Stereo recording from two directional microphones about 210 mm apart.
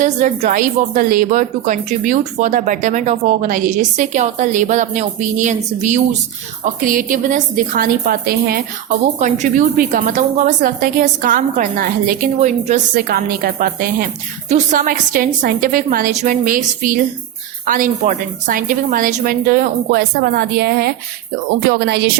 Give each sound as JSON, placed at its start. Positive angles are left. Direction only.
{"t": 0.0, "sound": "a woman's voice", "side_deg": -35}